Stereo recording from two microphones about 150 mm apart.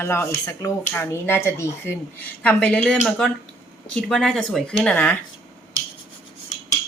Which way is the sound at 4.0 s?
5° left (ahead or behind).